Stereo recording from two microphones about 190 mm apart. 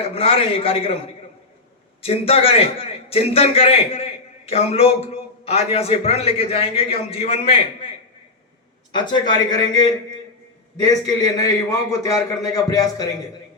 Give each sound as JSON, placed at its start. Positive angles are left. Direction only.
{"t": 0.0, "sound": "a man's voice", "side_deg": 30}
{"t": 8.9, "sound": "a man's voice", "side_deg": 20}